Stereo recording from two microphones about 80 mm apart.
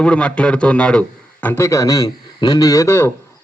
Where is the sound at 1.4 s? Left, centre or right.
Left.